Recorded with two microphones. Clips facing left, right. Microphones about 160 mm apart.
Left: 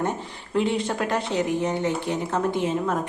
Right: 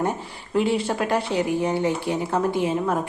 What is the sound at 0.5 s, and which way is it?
A woman's voice, 5° right (ahead or behind).